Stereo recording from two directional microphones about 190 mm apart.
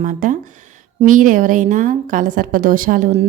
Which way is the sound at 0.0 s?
40° right (ahead or behind).